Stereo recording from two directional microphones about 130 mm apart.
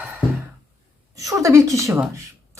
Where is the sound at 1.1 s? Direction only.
25° right (ahead or behind).